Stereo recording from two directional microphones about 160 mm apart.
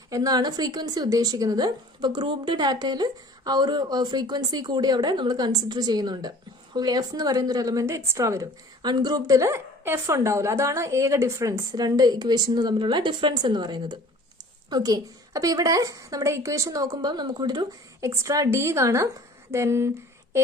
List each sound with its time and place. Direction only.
0.1 s a woman's voice: 20° right (ahead or behind)